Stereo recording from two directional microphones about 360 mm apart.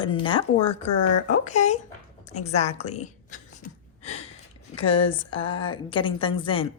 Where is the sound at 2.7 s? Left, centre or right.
Centre.